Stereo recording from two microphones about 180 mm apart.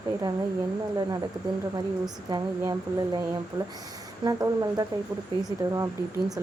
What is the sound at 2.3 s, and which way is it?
Speech, 25° right (ahead or behind).